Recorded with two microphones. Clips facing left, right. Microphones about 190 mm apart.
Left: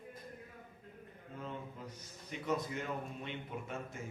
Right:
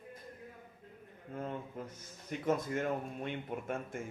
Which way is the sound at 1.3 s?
50° right (ahead or behind).